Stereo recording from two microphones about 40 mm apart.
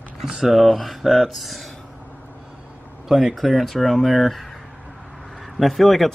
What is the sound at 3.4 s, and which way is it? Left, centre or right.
Speech, centre.